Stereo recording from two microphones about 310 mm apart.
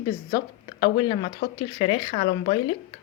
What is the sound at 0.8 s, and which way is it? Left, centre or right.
Speech, centre.